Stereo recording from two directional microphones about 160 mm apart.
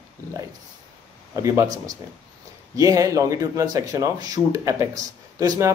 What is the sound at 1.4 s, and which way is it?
Speech, 20° right (ahead or behind).